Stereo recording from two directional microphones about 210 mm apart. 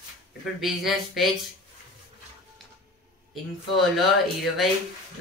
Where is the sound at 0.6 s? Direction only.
Centre (ahead or behind).